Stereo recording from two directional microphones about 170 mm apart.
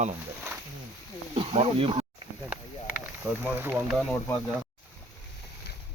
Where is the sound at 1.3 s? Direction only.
35° right (ahead or behind).